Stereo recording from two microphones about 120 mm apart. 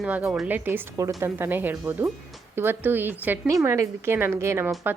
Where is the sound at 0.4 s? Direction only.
15° right (ahead or behind).